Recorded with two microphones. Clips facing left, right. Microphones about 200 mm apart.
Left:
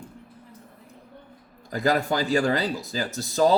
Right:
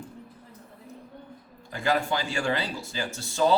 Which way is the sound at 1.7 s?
40° left (ahead or behind).